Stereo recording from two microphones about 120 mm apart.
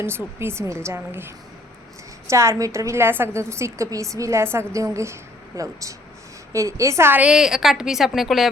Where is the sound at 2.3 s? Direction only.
25° right (ahead or behind).